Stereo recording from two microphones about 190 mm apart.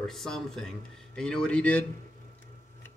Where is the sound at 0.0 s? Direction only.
Centre (ahead or behind).